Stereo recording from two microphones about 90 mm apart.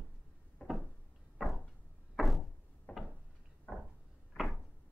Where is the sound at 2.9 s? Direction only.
20° left (ahead or behind).